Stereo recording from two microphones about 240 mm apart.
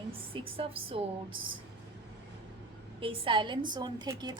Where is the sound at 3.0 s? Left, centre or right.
Right.